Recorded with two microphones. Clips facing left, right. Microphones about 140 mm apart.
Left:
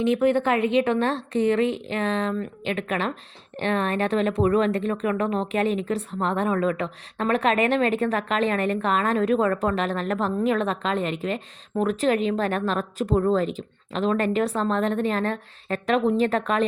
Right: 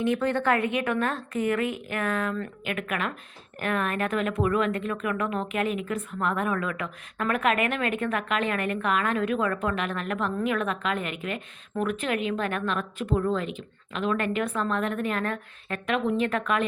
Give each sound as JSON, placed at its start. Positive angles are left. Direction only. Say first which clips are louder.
{"t": 0.0, "sound": "a woman's voice", "louder": "left 4 dB", "side_deg": 20}